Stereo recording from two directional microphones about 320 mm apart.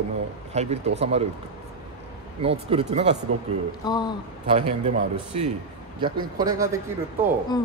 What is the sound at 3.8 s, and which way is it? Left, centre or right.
Speech, centre.